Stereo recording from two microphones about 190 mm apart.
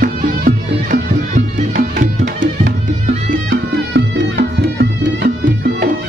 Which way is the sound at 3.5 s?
65° right (ahead or behind).